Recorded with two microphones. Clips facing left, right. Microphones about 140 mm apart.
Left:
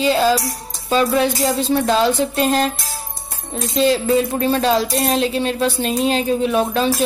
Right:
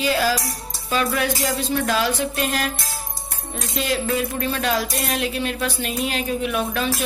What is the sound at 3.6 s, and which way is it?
Speech, 30° left (ahead or behind).